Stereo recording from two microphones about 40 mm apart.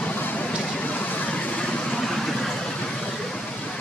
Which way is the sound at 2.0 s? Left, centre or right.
Centre.